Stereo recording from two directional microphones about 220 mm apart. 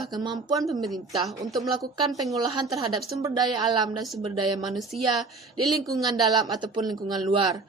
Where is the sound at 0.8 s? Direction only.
Centre (ahead or behind).